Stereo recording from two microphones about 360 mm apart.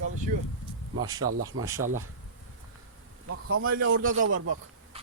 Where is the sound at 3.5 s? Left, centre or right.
Right.